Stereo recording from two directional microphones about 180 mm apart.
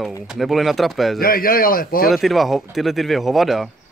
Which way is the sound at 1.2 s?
55° left (ahead or behind).